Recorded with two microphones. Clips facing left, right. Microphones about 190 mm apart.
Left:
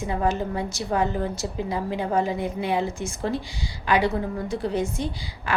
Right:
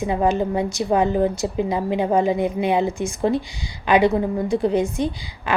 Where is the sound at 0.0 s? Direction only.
15° right (ahead or behind).